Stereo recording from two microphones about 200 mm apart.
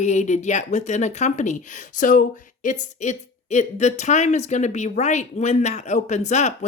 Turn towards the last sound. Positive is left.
turn(degrees=35)  # may be behind; listen again after turning